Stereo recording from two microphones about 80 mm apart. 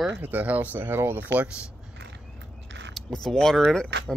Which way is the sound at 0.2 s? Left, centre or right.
Right.